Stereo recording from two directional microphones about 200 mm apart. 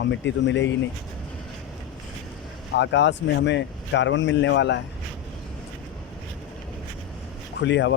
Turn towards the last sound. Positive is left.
turn(degrees=60)  # may be behind; listen again after turning